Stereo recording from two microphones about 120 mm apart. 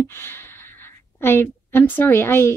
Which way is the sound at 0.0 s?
20° left (ahead or behind).